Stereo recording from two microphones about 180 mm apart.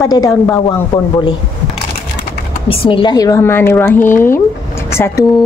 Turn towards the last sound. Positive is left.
turn(degrees=15)  # may be behind; listen again after turning